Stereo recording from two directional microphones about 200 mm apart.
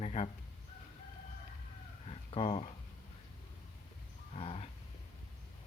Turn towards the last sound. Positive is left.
turn(degrees=30)  # may be behind; listen again after turning